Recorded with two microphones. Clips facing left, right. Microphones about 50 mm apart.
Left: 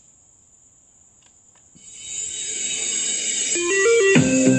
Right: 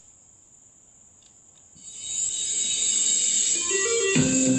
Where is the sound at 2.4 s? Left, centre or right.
Left.